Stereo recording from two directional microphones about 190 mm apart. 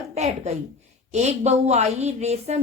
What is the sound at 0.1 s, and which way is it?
A woman's voice, 35° right (ahead or behind).